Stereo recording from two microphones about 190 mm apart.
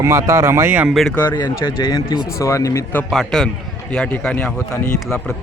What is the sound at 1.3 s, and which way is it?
A man's voice, 20° left (ahead or behind).